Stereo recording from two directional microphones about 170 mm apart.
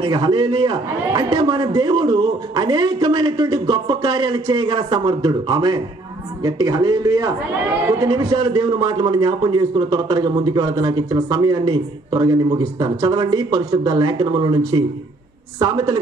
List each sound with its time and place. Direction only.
0.0 s a man's voice: 30° right (ahead or behind)
15.6 s a man's voice: 25° right (ahead or behind)